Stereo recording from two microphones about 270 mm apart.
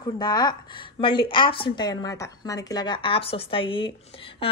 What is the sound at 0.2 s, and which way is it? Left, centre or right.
A woman's voice, centre.